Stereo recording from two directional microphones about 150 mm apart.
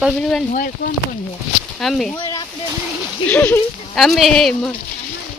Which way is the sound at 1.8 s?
Centre (ahead or behind).